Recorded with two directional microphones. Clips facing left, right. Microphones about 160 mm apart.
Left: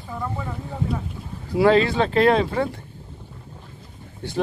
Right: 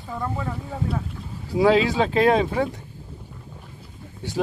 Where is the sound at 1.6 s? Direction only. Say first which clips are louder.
Left 1 dB; 10° right (ahead or behind).